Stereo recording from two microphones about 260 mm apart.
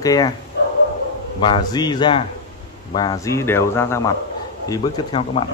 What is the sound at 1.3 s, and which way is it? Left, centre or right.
Speech, centre.